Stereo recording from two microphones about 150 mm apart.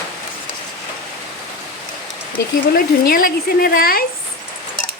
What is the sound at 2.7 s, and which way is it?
Speech, 75° left (ahead or behind).